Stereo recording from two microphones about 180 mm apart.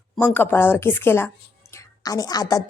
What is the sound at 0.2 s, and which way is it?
A woman's voice, 10° left (ahead or behind).